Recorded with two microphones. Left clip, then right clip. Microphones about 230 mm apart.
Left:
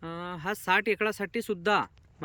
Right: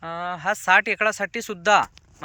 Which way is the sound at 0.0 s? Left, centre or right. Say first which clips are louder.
Right 9 dB; centre.